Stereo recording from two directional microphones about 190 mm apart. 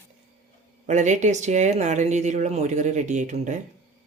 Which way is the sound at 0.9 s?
40° right (ahead or behind).